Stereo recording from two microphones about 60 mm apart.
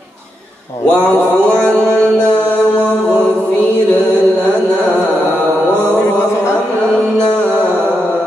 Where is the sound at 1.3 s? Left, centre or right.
Centre.